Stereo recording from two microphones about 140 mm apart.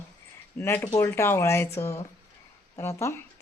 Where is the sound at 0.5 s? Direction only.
15° left (ahead or behind).